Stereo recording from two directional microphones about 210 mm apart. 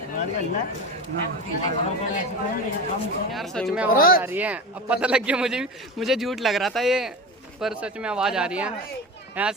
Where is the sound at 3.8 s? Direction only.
45° left (ahead or behind).